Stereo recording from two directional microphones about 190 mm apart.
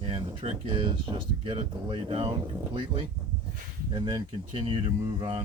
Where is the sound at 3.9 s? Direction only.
25° right (ahead or behind).